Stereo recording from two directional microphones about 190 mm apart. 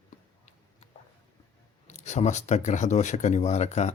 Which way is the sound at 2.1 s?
35° left (ahead or behind).